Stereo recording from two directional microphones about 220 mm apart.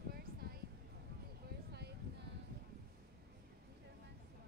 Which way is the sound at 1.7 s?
50° right (ahead or behind).